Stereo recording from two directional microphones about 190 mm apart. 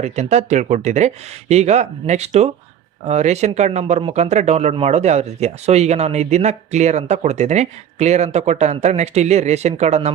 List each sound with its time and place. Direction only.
0.0 s speech: 35° right (ahead or behind)